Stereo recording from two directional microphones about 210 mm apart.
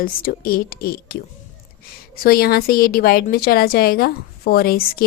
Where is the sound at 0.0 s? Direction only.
45° left (ahead or behind).